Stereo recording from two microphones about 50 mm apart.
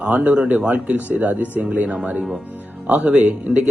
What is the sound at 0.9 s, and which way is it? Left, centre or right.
Speech, right.